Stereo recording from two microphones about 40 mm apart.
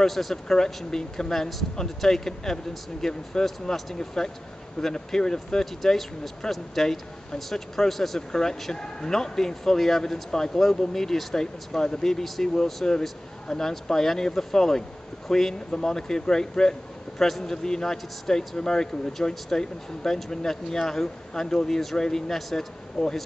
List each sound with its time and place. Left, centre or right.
0.0 s speech: centre